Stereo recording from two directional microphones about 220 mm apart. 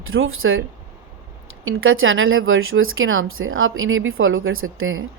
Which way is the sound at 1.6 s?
65° right (ahead or behind).